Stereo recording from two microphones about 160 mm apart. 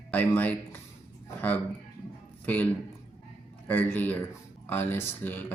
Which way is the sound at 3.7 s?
10° left (ahead or behind).